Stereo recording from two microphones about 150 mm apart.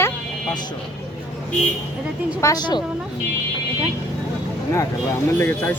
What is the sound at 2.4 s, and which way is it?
Speech, 25° left (ahead or behind).